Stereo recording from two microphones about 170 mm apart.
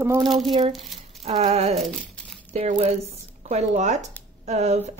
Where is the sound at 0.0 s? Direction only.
15° right (ahead or behind).